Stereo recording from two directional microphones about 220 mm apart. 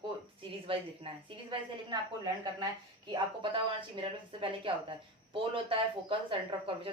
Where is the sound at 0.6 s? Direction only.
25° right (ahead or behind).